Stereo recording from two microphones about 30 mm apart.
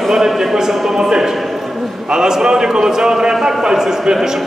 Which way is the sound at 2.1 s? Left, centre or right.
Right.